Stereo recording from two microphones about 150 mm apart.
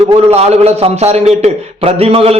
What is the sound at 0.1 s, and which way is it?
A man's voice, 45° right (ahead or behind).